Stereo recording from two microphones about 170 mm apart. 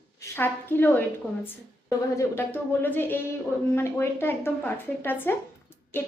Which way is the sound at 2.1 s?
15° left (ahead or behind).